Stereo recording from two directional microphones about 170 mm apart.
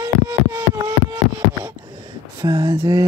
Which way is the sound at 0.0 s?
20° right (ahead or behind).